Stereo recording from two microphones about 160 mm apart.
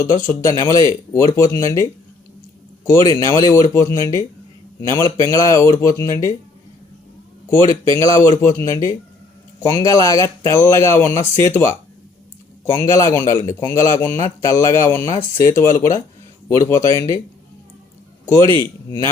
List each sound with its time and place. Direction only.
0.0 s speech: 20° left (ahead or behind)
7.5 s speech: 20° left (ahead or behind)
18.3 s speech: 20° left (ahead or behind)